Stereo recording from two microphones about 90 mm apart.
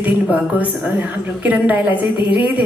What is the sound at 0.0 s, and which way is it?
A woman's voice, 15° right (ahead or behind).